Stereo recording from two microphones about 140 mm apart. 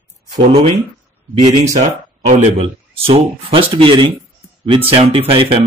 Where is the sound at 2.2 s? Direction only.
50° right (ahead or behind).